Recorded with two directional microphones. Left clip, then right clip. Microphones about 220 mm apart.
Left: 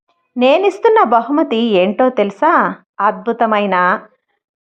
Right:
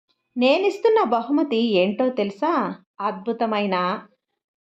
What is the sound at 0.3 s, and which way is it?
A woman's voice, 15° left (ahead or behind).